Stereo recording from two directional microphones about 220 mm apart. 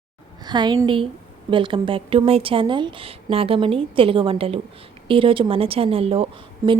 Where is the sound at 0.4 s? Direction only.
20° right (ahead or behind).